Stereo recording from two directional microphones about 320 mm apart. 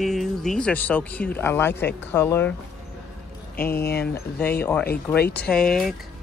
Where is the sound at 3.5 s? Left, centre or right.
Left.